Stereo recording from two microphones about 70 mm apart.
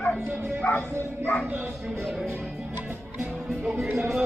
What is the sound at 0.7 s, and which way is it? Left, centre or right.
Speech, left.